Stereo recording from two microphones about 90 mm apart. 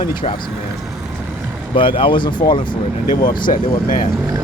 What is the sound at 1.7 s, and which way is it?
Speech, 70° left (ahead or behind).